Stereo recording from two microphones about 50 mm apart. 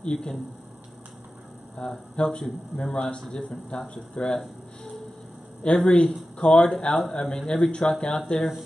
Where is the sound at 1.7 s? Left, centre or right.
Centre.